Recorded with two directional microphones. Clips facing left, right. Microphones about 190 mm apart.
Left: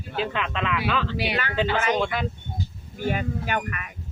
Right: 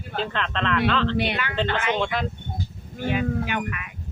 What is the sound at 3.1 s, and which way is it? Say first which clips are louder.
Speech: right 2 dB; 45° left (ahead or behind).